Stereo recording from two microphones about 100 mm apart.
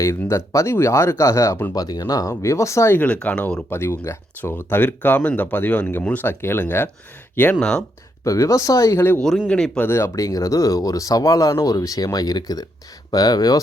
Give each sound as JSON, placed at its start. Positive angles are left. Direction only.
{"t": 0.3, "sound": "speech", "side_deg": 30}
{"t": 1.7, "sound": "speech", "side_deg": 40}
{"t": 3.0, "sound": "speech", "side_deg": 15}
{"t": 7.6, "sound": "speech", "side_deg": 5}
{"t": 8.2, "sound": "speech", "side_deg": 35}
{"t": 9.5, "sound": "speech", "side_deg": 10}
{"t": 9.8, "sound": "speech", "side_deg": 25}
{"t": 10.2, "sound": "speech", "side_deg": 35}